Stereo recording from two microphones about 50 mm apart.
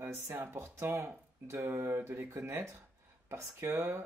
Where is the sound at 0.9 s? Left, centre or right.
Right.